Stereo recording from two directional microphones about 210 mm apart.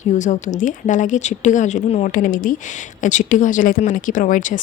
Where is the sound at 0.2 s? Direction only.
35° left (ahead or behind).